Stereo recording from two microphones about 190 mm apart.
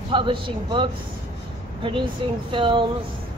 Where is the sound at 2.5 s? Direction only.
25° right (ahead or behind).